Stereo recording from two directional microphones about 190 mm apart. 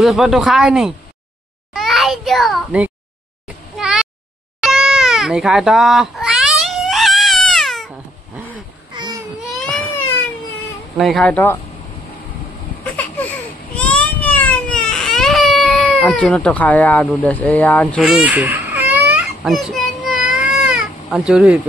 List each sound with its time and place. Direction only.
0.0 s a child's voice: centre (ahead or behind)
3.7 s a sound: 5° right (ahead or behind)
4.6 s cat: 5° right (ahead or behind)
8.9 s a sound: 20° right (ahead or behind)
9.5 s baby cry: centre (ahead or behind)
11.0 s speech: centre (ahead or behind)
13.7 s baby cry: 5° left (ahead or behind)
18.0 s baby cry: 5° right (ahead or behind)